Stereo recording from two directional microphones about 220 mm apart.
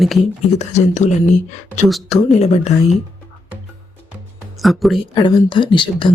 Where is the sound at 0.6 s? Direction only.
30° left (ahead or behind).